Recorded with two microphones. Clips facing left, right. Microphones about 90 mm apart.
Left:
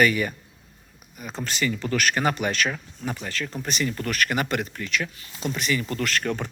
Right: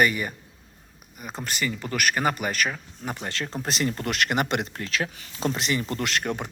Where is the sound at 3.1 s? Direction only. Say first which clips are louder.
Right 2 dB; 25° right (ahead or behind).